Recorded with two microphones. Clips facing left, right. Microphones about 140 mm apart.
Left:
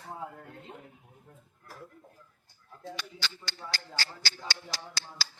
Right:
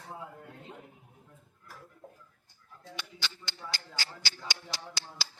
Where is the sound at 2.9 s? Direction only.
20° right (ahead or behind).